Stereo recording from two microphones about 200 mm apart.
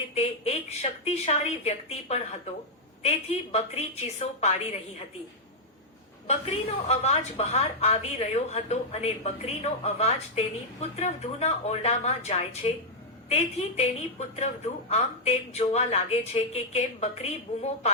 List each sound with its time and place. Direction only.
0.1 s a woman's voice: 30° left (ahead or behind)
3.5 s a woman's voice: 35° left (ahead or behind)
6.2 s a woman's voice: 30° left (ahead or behind)